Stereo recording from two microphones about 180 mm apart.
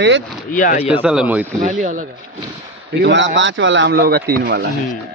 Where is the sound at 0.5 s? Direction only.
45° left (ahead or behind).